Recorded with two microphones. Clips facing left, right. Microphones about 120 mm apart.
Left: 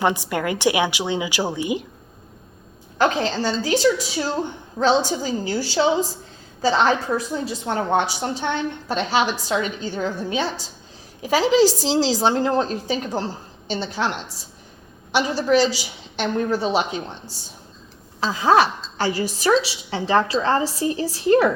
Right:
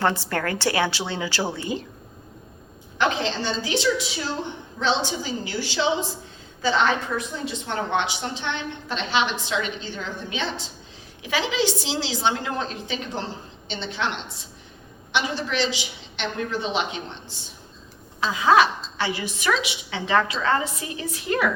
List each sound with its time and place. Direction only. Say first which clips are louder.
0.0 s a woman's voice: left 2 dB; 15° left (ahead or behind)
3.0 s a woman's voice: left 4 dB; 40° left (ahead or behind)
15.1 s a woman's voice: left 7 dB; 40° left (ahead or behind)
18.2 s a woman's voice: left 1 dB; 35° left (ahead or behind)